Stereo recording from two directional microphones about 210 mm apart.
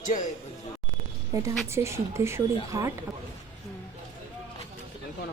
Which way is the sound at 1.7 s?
15° right (ahead or behind).